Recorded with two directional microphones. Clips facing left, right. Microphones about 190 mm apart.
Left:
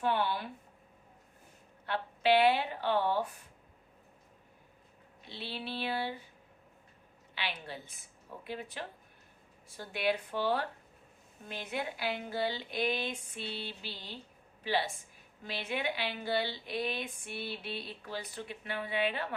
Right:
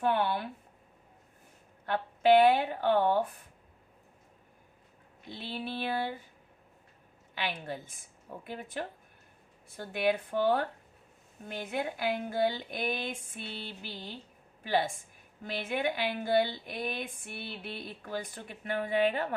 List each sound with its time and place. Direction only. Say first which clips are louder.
0.0 s speech: right 3 dB; 55° right (ahead or behind)
1.9 s a woman's voice: right 5 dB; 50° right (ahead or behind)
5.3 s a woman's voice: right 3 dB; 50° right (ahead or behind)
7.3 s a woman's voice: right 4 dB; 45° right (ahead or behind)